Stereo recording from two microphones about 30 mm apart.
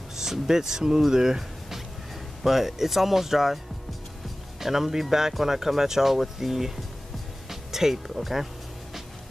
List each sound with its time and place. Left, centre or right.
0.2 s speech: centre
4.6 s speech: centre